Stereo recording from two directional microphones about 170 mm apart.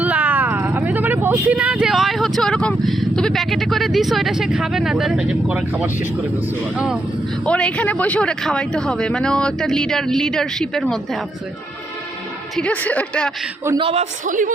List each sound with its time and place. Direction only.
0.0 s speech: 10° right (ahead or behind)
7.4 s speech: 5° left (ahead or behind)
12.5 s speech: 10° left (ahead or behind)
13.7 s a man's voice: 35° right (ahead or behind)